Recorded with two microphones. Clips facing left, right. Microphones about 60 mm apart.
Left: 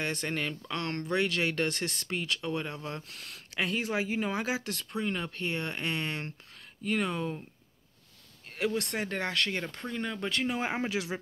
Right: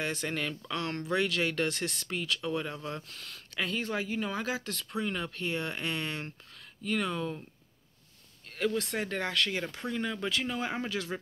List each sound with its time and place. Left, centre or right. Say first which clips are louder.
0.0 s speech: left 1 dB; centre
0.7 s speech: even; centre
8.5 s speech: even; centre
10.6 s speech: left 2 dB; left